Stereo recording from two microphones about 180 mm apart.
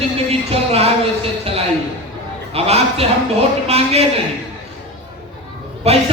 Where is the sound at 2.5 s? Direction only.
35° right (ahead or behind).